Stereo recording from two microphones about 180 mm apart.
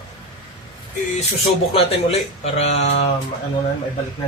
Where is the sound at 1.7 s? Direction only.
35° left (ahead or behind).